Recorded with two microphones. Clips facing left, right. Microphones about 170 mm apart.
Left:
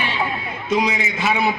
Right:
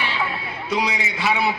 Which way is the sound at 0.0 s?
20° left (ahead or behind).